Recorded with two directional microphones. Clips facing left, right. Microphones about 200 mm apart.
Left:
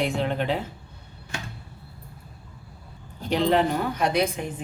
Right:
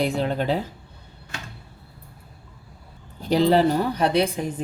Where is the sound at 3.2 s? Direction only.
35° right (ahead or behind).